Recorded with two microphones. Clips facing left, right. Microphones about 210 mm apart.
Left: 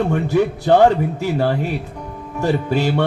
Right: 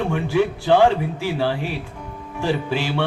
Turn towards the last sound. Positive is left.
turn(degrees=45)  # may be behind; listen again after turning